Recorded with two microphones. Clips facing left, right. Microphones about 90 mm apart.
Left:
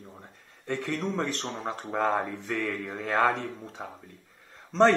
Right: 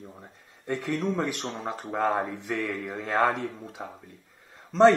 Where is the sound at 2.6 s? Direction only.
5° right (ahead or behind).